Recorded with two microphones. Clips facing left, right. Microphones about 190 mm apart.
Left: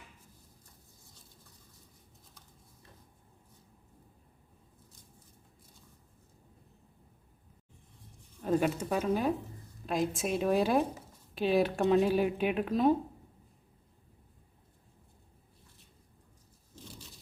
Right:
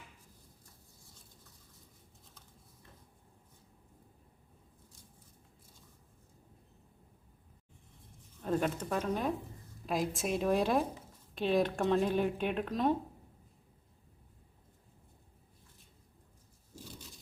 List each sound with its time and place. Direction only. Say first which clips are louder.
8.4 s speech: left 4 dB; 5° left (ahead or behind)